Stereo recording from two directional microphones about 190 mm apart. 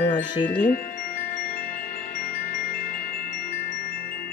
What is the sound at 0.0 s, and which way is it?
Chime, 25° left (ahead or behind).